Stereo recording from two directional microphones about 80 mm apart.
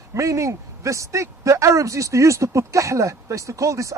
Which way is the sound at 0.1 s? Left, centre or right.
Right.